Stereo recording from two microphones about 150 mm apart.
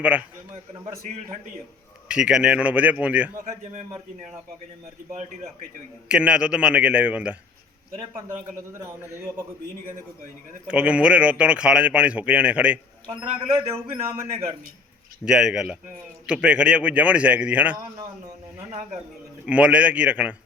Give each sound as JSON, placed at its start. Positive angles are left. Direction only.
{"t": 0.0, "sound": "speech", "side_deg": -10}
{"t": 2.0, "sound": "speech", "side_deg": -5}
{"t": 3.4, "sound": "a man's voice", "side_deg": -55}
{"t": 6.1, "sound": "speech", "side_deg": -5}
{"t": 10.7, "sound": "speech", "side_deg": -10}
{"t": 13.5, "sound": "a man's voice", "side_deg": -40}
{"t": 15.2, "sound": "speech", "side_deg": -5}
{"t": 19.5, "sound": "speech", "side_deg": -10}